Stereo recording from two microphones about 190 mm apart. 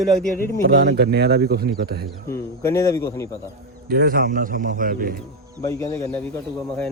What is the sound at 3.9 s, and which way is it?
A man's voice, 50° right (ahead or behind).